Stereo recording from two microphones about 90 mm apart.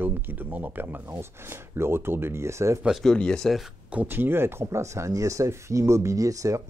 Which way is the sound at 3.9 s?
20° right (ahead or behind).